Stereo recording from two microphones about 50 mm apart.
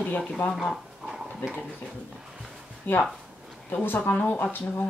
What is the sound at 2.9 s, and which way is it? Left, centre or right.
Speech, left.